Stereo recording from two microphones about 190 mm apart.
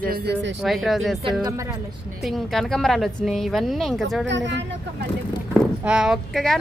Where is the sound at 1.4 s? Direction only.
15° right (ahead or behind).